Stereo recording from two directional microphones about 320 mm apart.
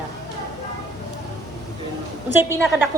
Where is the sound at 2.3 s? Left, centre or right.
Centre.